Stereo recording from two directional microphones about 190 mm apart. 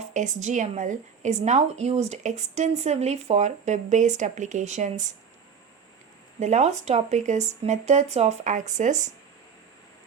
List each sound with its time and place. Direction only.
0.0 s a woman's voice: 40° right (ahead or behind)
6.4 s a woman's voice: 40° right (ahead or behind)